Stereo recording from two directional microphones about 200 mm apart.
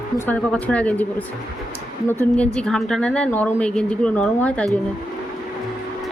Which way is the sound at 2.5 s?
5° left (ahead or behind).